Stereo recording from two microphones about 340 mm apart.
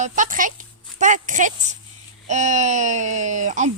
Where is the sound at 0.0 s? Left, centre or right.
Right.